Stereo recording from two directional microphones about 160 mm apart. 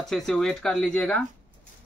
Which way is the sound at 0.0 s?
5° left (ahead or behind).